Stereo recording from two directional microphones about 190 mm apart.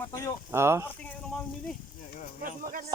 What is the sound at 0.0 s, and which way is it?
Speech, 15° left (ahead or behind).